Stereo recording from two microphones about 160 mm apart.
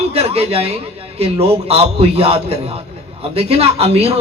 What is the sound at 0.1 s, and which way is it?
A man's voice, 40° right (ahead or behind).